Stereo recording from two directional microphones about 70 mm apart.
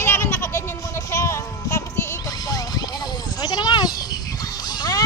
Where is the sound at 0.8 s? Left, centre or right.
Left.